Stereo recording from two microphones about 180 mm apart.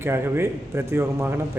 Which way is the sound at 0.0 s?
15° right (ahead or behind).